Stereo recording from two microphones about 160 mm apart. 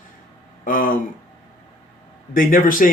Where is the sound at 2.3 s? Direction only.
60° left (ahead or behind).